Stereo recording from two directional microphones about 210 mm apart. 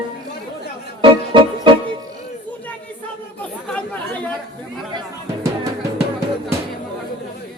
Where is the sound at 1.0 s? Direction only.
25° right (ahead or behind).